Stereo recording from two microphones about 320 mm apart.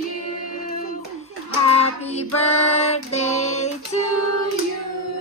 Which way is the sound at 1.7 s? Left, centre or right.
Centre.